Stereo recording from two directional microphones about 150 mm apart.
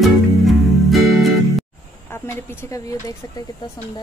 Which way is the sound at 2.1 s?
15° left (ahead or behind).